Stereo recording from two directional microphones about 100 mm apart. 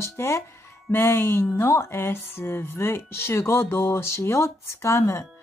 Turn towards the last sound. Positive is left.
turn(degrees=30)  # may be behind; listen again after turning